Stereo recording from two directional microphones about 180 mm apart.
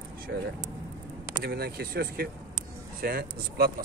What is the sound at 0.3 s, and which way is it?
Speech, 70° right (ahead or behind).